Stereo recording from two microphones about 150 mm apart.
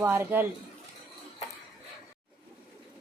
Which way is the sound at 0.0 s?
15° right (ahead or behind).